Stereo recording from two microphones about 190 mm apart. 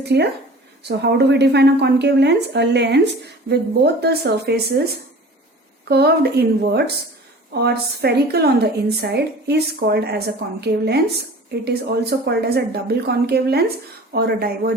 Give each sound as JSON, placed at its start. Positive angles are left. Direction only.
{"t": 0.0, "sound": "a woman's voice", "side_deg": -60}
{"t": 5.9, "sound": "a woman's voice", "side_deg": -60}